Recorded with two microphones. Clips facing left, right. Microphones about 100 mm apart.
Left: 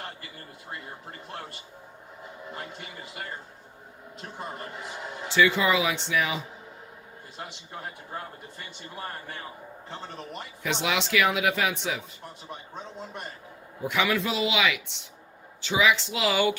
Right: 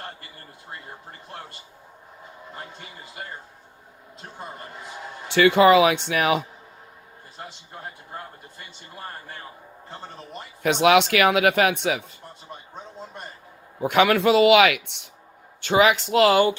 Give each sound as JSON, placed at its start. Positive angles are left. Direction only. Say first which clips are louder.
{"t": 5.3, "sound": "a man's voice", "louder": "right 8 dB", "side_deg": -60}
{"t": 10.6, "sound": "a man's voice", "louder": "right 11 dB", "side_deg": -60}
{"t": 13.8, "sound": "a man's voice", "louder": "right 8 dB", "side_deg": -60}